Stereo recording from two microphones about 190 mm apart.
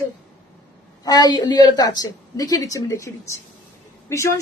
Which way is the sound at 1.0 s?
20° left (ahead or behind).